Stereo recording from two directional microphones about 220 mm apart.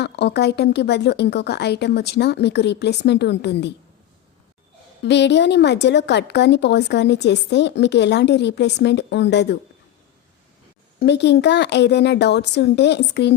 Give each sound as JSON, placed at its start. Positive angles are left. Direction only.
{"t": 0.0, "sound": "a woman's voice", "side_deg": 50}
{"t": 5.0, "sound": "a woman's voice", "side_deg": 50}
{"t": 11.0, "sound": "a woman's voice", "side_deg": 50}